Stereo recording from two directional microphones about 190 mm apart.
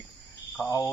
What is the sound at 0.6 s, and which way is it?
Speech, 15° left (ahead or behind).